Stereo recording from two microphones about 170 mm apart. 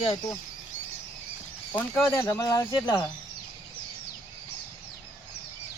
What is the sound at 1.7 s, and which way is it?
Speech, 10° left (ahead or behind).